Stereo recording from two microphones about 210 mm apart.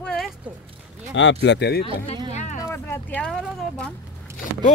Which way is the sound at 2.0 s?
35° left (ahead or behind).